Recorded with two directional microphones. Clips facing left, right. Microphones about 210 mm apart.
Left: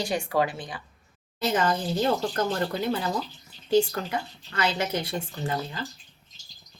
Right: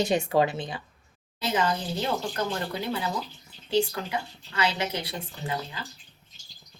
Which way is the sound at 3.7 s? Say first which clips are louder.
Left 3 dB; 50° left (ahead or behind).